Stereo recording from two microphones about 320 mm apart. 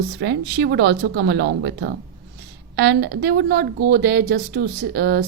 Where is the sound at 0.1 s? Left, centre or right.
Right.